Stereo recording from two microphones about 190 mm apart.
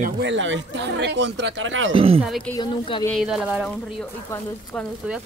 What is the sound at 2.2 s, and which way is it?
Speech, centre (ahead or behind).